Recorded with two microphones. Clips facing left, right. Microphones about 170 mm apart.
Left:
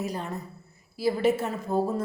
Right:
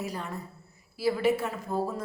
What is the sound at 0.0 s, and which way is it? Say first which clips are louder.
A woman's voice: left 3 dB; 20° left (ahead or behind).